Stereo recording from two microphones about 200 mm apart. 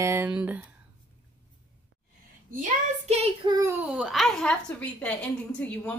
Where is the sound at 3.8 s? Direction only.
5° right (ahead or behind).